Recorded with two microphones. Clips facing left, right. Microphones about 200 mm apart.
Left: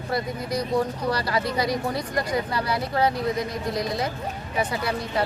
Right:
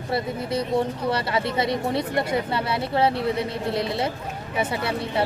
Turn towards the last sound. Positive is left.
turn(degrees=-25)  # may be behind; listen again after turning